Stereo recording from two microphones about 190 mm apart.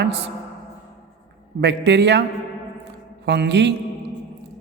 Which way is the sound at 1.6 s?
65° right (ahead or behind).